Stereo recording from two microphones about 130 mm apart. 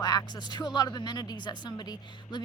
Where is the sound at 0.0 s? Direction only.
30° left (ahead or behind).